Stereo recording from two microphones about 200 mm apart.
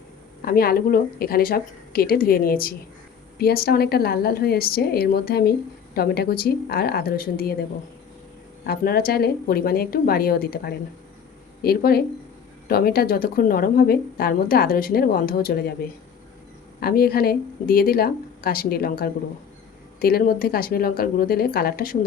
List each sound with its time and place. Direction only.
0.4 s a woman's voice: 50° left (ahead or behind)
8.6 s a woman's voice: 50° left (ahead or behind)
16.8 s a woman's voice: 50° left (ahead or behind)